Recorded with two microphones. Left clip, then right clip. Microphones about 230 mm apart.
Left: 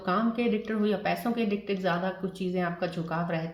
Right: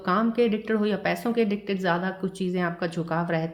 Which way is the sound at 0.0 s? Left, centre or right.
Right.